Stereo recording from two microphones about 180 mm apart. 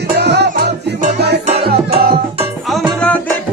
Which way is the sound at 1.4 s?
35° right (ahead or behind).